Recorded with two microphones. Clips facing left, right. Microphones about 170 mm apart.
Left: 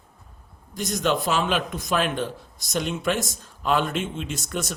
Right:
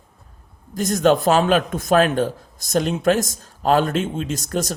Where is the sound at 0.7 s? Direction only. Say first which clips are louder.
Right 7 dB; 45° right (ahead or behind).